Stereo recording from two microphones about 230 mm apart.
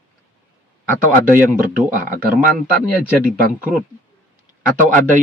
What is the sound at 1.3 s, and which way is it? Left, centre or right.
Speech, right.